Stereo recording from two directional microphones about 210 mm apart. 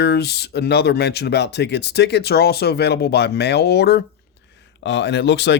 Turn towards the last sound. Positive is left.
turn(degrees=55)  # may be behind; listen again after turning